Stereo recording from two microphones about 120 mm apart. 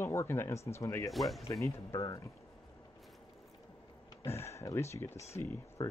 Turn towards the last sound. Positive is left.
turn(degrees=20)  # may be behind; listen again after turning